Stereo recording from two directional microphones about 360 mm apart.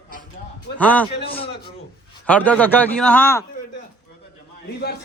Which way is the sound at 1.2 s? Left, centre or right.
Centre.